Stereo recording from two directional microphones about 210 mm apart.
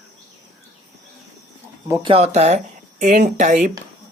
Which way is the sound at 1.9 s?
25° right (ahead or behind).